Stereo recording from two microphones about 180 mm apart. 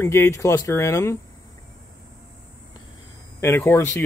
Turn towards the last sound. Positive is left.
turn(degrees=10)  # may be behind; listen again after turning